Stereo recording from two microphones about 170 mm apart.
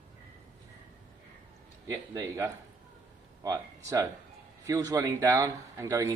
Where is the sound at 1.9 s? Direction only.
15° right (ahead or behind).